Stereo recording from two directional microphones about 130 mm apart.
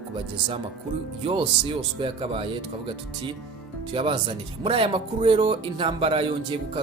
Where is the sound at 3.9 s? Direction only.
40° right (ahead or behind).